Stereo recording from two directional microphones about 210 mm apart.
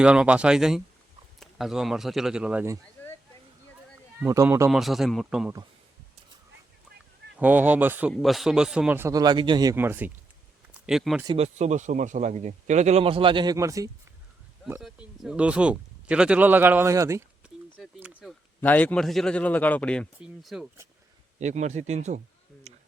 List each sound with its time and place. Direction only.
0.0 s speech: 5° right (ahead or behind)
3.0 s a sound: 10° left (ahead or behind)
4.2 s a man's voice: 10° right (ahead or behind)
4.7 s speech: centre (ahead or behind)
7.3 s a man's voice: 10° right (ahead or behind)
11.3 s speech: 30° right (ahead or behind); by 13.9 s 15° right (ahead or behind)
14.6 s speech: centre (ahead or behind)
18.2 s speech: 5° left (ahead or behind)
21.3 s speech: 35° right (ahead or behind)
22.7 s a sound: 30° right (ahead or behind)